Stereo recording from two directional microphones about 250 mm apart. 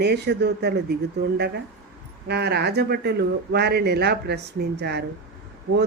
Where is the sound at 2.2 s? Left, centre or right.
Right.